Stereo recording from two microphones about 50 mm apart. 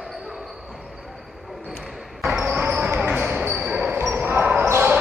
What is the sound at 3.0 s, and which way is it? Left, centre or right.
Basketball bounce, right.